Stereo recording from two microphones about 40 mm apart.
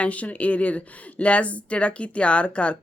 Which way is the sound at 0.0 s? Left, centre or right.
Left.